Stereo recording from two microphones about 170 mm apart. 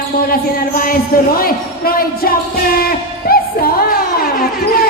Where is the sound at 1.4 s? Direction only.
60° left (ahead or behind).